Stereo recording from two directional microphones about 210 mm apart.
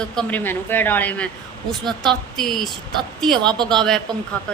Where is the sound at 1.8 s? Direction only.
20° right (ahead or behind).